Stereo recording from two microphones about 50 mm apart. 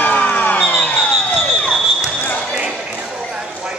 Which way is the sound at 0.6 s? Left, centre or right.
Left.